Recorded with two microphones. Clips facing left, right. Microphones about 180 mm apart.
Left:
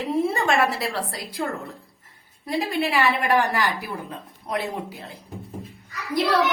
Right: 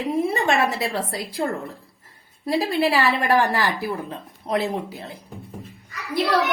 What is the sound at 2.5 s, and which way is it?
A woman's voice, 35° right (ahead or behind).